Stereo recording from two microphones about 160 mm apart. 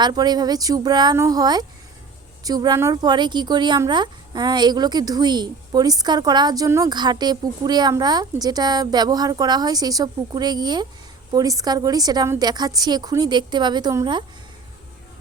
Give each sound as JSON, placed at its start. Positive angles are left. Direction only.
{"t": 0.0, "sound": "speech", "side_deg": -25}